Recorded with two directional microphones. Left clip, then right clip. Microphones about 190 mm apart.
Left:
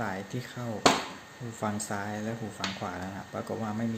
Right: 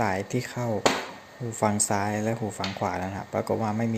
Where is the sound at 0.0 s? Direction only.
35° right (ahead or behind).